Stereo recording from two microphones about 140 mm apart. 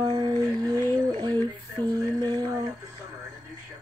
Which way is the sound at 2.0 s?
25° right (ahead or behind).